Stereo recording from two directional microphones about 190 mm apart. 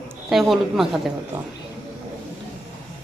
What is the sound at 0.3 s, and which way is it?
Speech, centre (ahead or behind).